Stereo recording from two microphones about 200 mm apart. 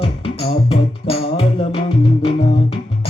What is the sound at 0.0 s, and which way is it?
Music, 25° left (ahead or behind).